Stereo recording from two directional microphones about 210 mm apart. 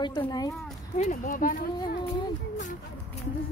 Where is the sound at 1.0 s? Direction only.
40° left (ahead or behind).